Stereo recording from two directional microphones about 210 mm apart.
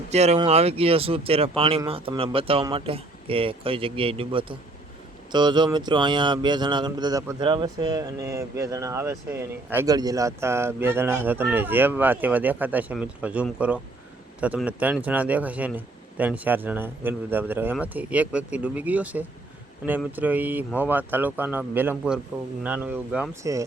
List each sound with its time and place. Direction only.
0.1 s speech: 30° right (ahead or behind); by 23.6 s 15° right (ahead or behind)